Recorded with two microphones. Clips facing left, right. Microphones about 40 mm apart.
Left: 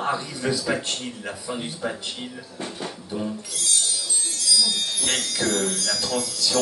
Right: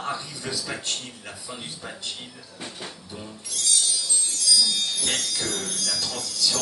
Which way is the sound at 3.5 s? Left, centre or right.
Centre.